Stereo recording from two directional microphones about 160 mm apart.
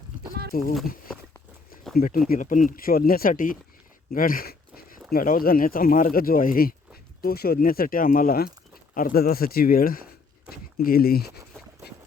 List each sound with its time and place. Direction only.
0.5 s speech: 65° left (ahead or behind)
2.0 s speech: 60° left (ahead or behind)
4.1 s dog: 60° left (ahead or behind)
5.1 s speech: 65° left (ahead or behind)